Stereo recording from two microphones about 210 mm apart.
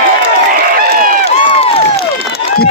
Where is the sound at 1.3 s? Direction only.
30° left (ahead or behind).